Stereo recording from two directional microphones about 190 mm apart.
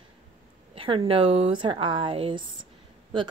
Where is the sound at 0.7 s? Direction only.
25° right (ahead or behind).